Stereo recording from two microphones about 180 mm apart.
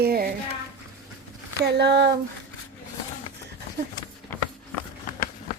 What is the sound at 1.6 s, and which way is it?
Speech, 70° right (ahead or behind).